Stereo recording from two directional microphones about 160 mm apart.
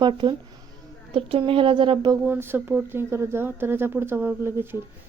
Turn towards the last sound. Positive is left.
turn(degrees=-15)  # may be behind; listen again after turning